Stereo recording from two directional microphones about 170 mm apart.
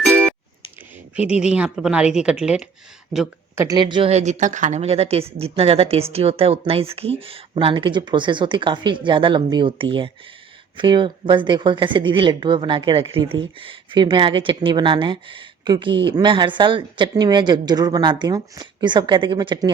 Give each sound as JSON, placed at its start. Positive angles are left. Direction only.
{"t": 0.0, "sound": "music", "side_deg": 5}
{"t": 1.1, "sound": "speech", "side_deg": -5}
{"t": 3.6, "sound": "speech", "side_deg": -25}
{"t": 4.1, "sound": "speech", "side_deg": -45}